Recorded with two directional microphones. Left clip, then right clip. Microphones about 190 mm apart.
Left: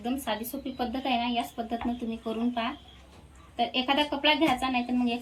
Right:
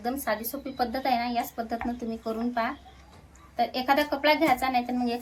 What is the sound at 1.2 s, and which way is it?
Speech, 20° right (ahead or behind).